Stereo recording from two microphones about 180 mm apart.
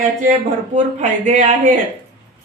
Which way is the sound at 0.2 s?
40° right (ahead or behind).